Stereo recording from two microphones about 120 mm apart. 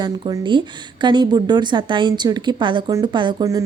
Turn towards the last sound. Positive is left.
turn(degrees=-40)  # may be behind; listen again after turning